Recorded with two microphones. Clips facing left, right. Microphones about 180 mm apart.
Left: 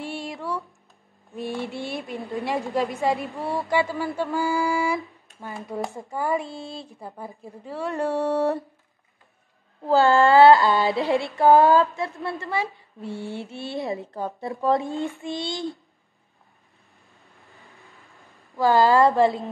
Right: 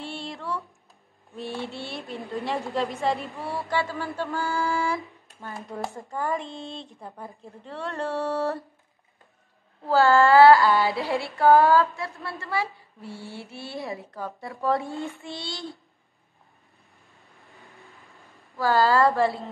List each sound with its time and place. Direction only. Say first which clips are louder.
0.0 s a sound: left 3 dB; 10° left (ahead or behind)
1.3 s a woman's voice: left 3 dB; 15° left (ahead or behind)
9.8 s female singing: left 1 dB; 20° left (ahead or behind)
18.6 s female singing: left 3 dB; 20° left (ahead or behind)